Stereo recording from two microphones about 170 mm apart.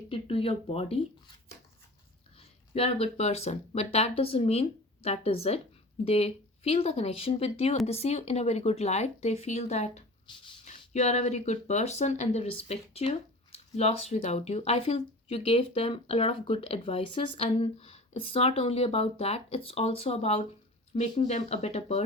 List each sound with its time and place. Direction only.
0.1 s speech: 35° left (ahead or behind)
2.4 s speech: 35° left (ahead or behind)